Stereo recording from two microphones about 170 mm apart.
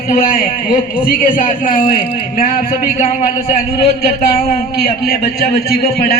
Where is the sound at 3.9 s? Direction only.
65° left (ahead or behind).